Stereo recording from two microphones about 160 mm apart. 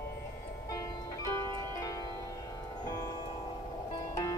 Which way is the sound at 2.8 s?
25° left (ahead or behind).